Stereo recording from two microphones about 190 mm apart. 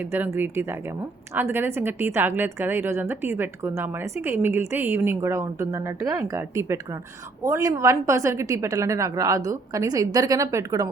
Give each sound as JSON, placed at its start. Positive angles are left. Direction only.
{"t": 0.1, "sound": "a woman's voice", "side_deg": -10}